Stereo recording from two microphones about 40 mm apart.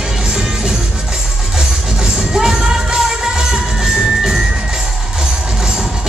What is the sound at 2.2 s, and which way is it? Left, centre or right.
Music, centre.